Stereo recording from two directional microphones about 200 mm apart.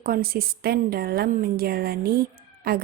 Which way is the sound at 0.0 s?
50° right (ahead or behind).